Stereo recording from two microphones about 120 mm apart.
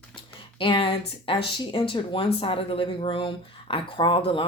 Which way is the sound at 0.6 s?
45° left (ahead or behind).